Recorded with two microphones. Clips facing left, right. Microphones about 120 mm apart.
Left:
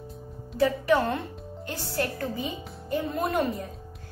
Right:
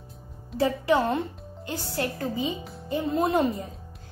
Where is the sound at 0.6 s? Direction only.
25° right (ahead or behind).